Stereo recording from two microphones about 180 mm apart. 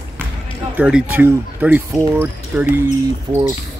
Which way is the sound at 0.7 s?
5° right (ahead or behind).